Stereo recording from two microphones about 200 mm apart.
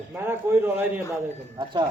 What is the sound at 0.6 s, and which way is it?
Speech, 10° right (ahead or behind).